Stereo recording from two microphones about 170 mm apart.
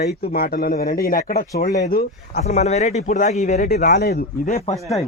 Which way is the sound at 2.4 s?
40° left (ahead or behind).